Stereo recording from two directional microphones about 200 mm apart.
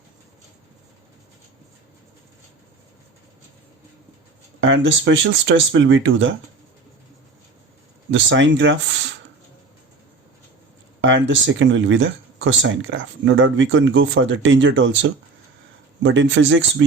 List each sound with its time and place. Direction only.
4.6 s speech: 70° right (ahead or behind)
8.1 s speech: 65° right (ahead or behind)
11.0 s speech: 70° right (ahead or behind)